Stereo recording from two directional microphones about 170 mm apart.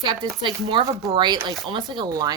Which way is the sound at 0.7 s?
20° right (ahead or behind).